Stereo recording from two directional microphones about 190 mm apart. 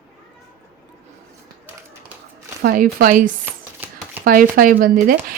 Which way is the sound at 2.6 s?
50° right (ahead or behind).